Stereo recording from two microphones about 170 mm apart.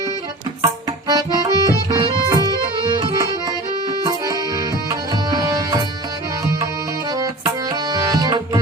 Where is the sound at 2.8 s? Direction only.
25° right (ahead or behind).